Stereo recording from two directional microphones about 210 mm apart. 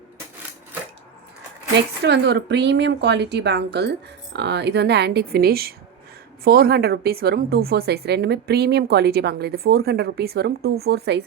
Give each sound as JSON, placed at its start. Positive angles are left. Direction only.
{"t": 1.7, "sound": "a woman's voice", "side_deg": -55}